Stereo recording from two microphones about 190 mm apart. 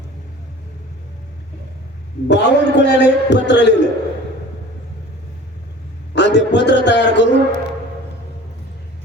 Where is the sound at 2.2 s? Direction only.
65° left (ahead or behind).